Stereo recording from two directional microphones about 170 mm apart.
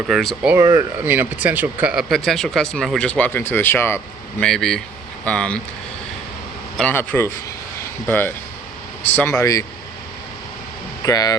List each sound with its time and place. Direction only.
0.1 s speech: centre (ahead or behind)
0.5 s speech: 15° right (ahead or behind); by 4.4 s 15° left (ahead or behind)
4.4 s speech: 5° left (ahead or behind)
6.7 s speech: 10° left (ahead or behind)
11.0 s speech: 20° left (ahead or behind)